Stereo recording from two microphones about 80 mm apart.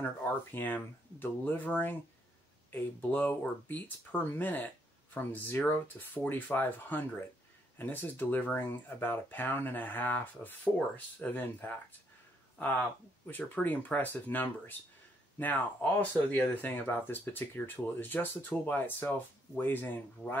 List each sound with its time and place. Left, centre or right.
0.0 s speech: left
13.3 s speech: left